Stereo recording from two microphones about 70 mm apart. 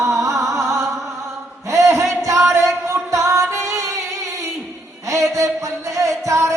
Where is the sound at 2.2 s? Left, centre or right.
Right.